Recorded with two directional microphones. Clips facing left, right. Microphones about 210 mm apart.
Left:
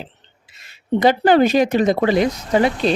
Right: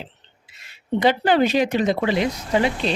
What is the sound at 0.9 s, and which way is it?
Speech, 45° left (ahead or behind).